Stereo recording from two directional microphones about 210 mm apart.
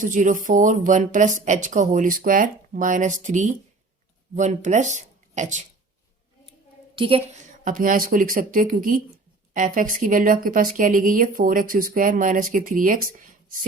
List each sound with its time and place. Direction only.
0.0 s speech: 40° right (ahead or behind)
6.9 s a woman's voice: 25° right (ahead or behind)
7.6 s speech: 40° right (ahead or behind)